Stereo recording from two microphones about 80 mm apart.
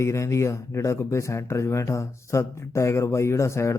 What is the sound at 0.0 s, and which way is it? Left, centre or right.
Speech, left.